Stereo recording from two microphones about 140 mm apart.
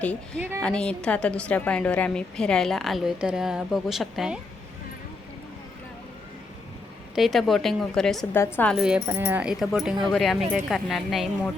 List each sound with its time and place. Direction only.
0.3 s a woman's voice: 15° right (ahead or behind)
0.6 s a woman's voice: 5° left (ahead or behind)
7.2 s a woman's voice: centre (ahead or behind)